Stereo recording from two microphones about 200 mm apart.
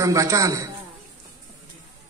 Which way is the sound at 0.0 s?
15° right (ahead or behind).